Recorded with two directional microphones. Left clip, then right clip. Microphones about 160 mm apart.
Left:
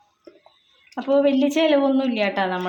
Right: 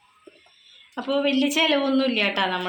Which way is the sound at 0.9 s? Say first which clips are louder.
Left 5 dB; 50° left (ahead or behind).